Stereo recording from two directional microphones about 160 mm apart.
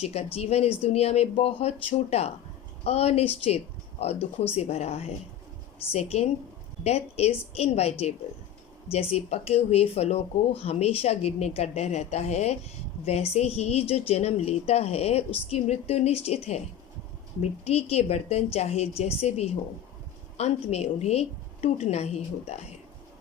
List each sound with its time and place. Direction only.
0.0 s a woman's voice: 40° left (ahead or behind)
17.7 s a woman's voice: 40° left (ahead or behind)